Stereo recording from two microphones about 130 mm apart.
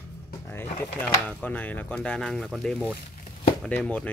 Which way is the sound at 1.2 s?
10° left (ahead or behind).